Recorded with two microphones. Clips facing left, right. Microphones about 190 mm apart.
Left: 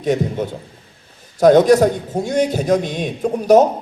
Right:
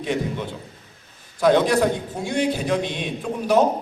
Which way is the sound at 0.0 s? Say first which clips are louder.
Left 6 dB; 45° left (ahead or behind).